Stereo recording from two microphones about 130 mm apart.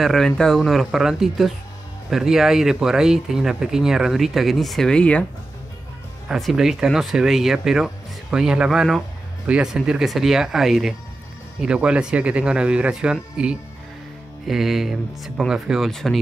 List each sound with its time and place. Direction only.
0.0 s speech: 5° left (ahead or behind)
6.2 s speech: centre (ahead or behind)